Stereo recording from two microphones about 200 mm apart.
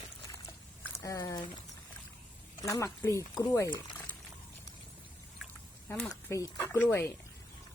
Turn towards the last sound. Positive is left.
turn(degrees=10)  # may be behind; listen again after turning